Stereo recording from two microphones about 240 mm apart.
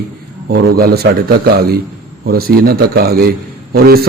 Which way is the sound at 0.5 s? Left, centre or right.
Right.